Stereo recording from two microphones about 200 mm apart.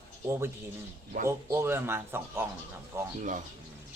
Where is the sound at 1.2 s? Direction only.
15° right (ahead or behind).